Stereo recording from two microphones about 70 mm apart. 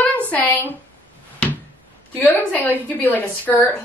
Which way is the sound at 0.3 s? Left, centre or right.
Left.